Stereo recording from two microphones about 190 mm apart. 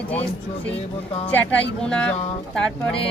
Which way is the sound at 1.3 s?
5° left (ahead or behind).